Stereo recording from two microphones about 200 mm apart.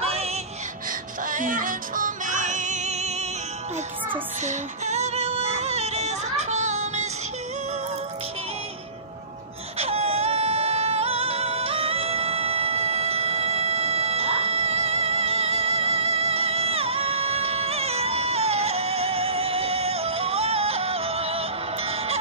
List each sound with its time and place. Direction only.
0.0 s music: 30° right (ahead or behind)
1.3 s music: 40° right (ahead or behind)
4.5 s female singing: 35° right (ahead or behind)
9.8 s a sound: 30° right (ahead or behind)